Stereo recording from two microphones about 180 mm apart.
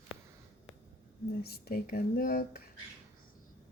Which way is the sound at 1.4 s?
60° left (ahead or behind).